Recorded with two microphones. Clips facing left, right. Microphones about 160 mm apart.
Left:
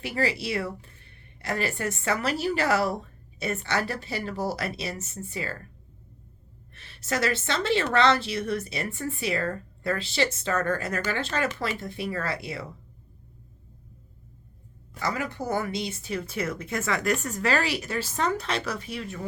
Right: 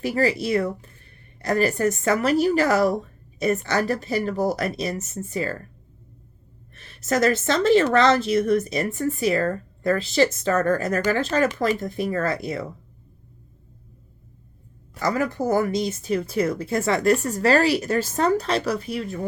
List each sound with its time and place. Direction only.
0.0 s a woman's voice: 40° right (ahead or behind)
6.7 s a woman's voice: 40° right (ahead or behind)
14.9 s a woman's voice: 45° right (ahead or behind)